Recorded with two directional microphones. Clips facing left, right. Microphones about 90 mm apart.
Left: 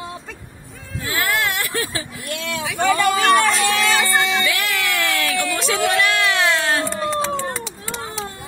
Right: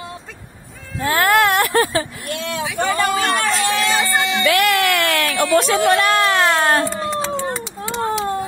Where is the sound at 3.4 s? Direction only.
Centre (ahead or behind).